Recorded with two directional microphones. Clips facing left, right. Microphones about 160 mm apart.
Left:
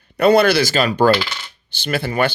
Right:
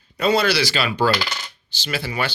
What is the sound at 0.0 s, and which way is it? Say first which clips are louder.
Speech: left 6 dB; 60° left (ahead or behind).